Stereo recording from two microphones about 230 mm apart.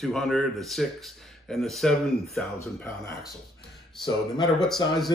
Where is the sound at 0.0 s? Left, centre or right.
Centre.